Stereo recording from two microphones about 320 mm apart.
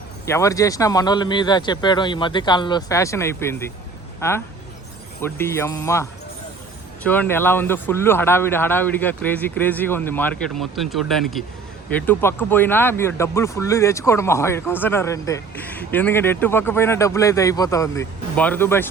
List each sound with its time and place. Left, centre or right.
0.3 s speech: centre